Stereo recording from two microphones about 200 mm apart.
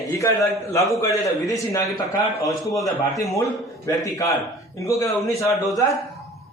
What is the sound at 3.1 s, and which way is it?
A man's voice, 15° left (ahead or behind).